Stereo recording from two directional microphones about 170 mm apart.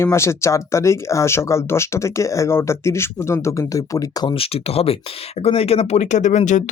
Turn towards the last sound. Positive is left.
turn(degrees=45)  # may be behind; listen again after turning